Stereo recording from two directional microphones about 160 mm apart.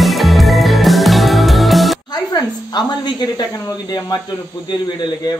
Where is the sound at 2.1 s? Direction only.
25° left (ahead or behind).